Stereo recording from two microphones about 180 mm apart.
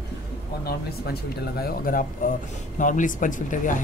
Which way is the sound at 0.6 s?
60° left (ahead or behind).